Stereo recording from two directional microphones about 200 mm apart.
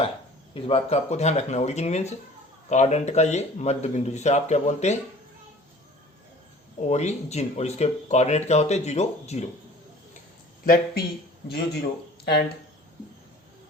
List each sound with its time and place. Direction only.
0.5 s speech: 30° left (ahead or behind)
6.7 s speech: 35° left (ahead or behind)
11.4 s a man's voice: 55° left (ahead or behind)